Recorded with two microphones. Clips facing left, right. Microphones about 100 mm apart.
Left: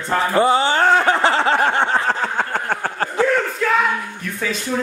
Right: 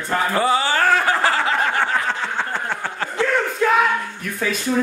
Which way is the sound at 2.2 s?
50° left (ahead or behind).